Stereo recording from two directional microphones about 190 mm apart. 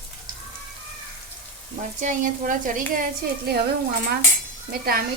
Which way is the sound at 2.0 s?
40° right (ahead or behind).